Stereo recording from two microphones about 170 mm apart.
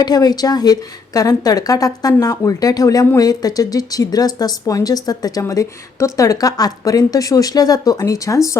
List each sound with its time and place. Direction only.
0.0 s a woman's voice: 25° left (ahead or behind)